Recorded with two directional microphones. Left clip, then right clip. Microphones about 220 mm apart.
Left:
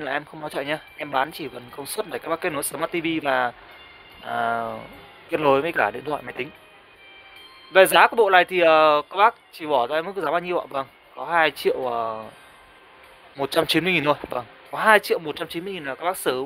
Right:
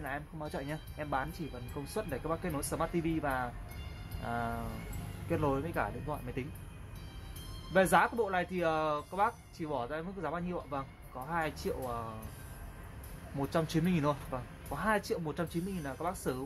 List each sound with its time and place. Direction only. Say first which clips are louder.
0.0 s speech: left 12 dB; 45° left (ahead or behind)
7.7 s speech: left 13 dB; 50° left (ahead or behind)
13.4 s speech: left 13 dB; 45° left (ahead or behind)